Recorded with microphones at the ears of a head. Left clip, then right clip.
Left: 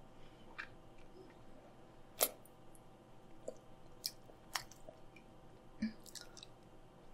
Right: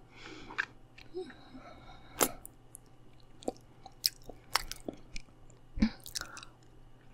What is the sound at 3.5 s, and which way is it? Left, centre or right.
Chewing, right.